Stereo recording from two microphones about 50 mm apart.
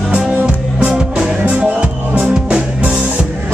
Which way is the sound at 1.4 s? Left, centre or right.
Right.